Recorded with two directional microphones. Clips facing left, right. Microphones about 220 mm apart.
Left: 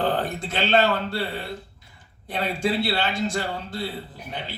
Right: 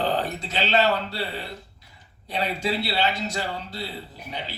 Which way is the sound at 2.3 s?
50° left (ahead or behind).